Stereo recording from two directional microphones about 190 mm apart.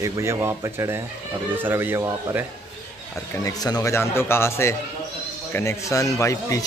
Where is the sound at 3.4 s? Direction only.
20° left (ahead or behind).